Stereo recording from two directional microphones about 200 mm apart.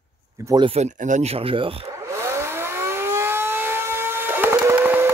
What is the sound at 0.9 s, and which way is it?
Speech, 40° right (ahead or behind).